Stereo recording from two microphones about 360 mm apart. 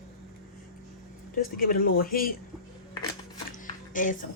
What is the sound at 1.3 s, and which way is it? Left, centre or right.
Speech, left.